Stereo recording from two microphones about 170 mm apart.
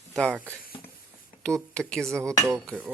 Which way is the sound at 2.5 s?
20° right (ahead or behind).